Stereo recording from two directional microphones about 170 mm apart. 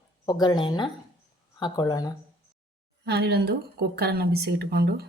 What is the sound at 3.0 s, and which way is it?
A woman's voice, 70° right (ahead or behind).